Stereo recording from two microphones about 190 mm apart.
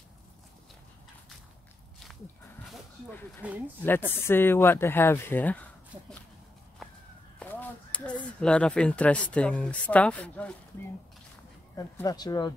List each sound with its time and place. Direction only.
3.4 s speech: 5° right (ahead or behind)
4.1 s speech: 10° left (ahead or behind)
7.3 s speech: 10° left (ahead or behind)
11.7 s speech: 20° left (ahead or behind)